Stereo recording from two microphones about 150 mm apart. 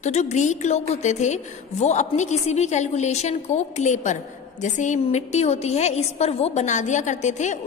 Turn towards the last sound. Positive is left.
turn(degrees=50)  # may be behind; listen again after turning